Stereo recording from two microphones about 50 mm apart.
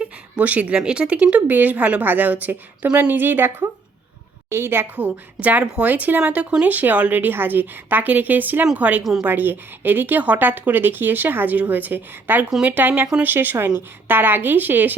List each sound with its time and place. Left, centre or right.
0.0 s a sound: right
0.8 s speech: centre
1.5 s speech: right
3.1 s a woman's voice: right
4.4 s a woman's voice: right
4.9 s speech: right
6.3 s speech: right
6.7 s a woman's voice: right